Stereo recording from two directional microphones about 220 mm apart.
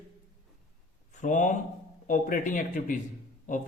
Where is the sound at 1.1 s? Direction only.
35° left (ahead or behind).